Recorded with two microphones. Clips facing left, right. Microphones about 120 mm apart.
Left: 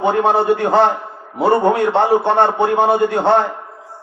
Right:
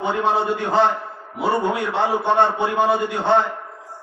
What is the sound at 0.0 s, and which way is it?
A man's voice, 55° left (ahead or behind).